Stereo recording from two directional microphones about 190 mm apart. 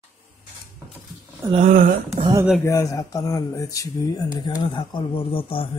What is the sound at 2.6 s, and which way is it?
Speech, 15° left (ahead or behind).